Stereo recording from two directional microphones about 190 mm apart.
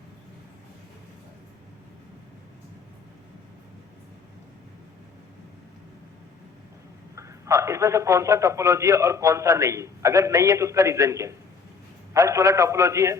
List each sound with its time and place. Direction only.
7.2 s a man's voice: 15° right (ahead or behind)